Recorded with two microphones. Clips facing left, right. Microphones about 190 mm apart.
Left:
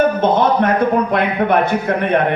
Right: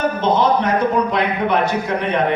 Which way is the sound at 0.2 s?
55° left (ahead or behind).